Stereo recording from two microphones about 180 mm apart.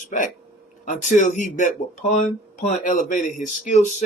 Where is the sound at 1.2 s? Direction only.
45° left (ahead or behind).